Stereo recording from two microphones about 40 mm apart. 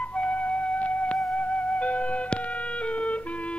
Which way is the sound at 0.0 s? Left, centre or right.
Left.